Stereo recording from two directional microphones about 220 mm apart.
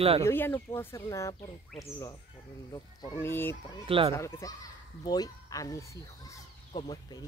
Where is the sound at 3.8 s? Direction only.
25° right (ahead or behind).